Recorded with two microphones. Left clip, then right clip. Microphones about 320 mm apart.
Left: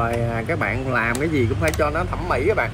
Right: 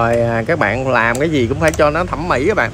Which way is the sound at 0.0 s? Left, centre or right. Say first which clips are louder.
Right 9 dB; right.